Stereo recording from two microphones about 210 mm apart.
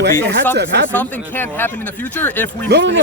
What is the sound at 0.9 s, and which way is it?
Speech, 10° left (ahead or behind).